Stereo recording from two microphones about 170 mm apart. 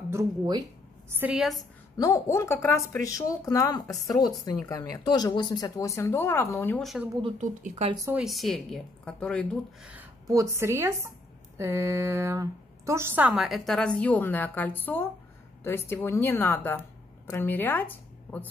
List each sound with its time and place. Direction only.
0.1 s speech: 25° right (ahead or behind)
1.2 s a woman's voice: 5° right (ahead or behind)
1.6 s a woman's voice: 20° left (ahead or behind)
6.8 s a woman's voice: centre (ahead or behind)
7.3 s speech: 45° right (ahead or behind)
8.1 s a woman's voice: centre (ahead or behind)
9.8 s a sound: 5° right (ahead or behind)
10.3 s a woman's voice: 15° right (ahead or behind); by 18.5 s 10° left (ahead or behind)